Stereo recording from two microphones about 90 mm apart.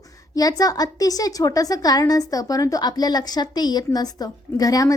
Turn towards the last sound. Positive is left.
turn(degrees=40)  # may be behind; listen again after turning